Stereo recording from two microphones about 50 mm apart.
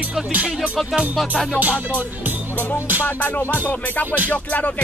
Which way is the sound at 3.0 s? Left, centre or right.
Left.